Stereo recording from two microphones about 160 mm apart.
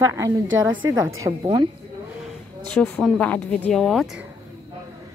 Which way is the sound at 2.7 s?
5° left (ahead or behind).